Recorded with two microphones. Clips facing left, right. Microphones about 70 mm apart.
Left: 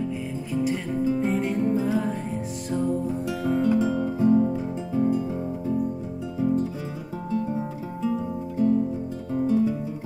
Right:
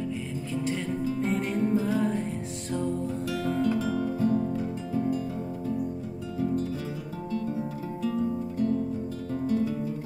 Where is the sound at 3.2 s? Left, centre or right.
Centre.